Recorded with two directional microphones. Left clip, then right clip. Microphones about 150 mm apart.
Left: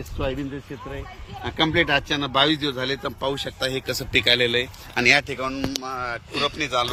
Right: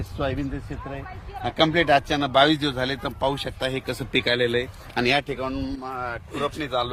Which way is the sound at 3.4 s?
90° right.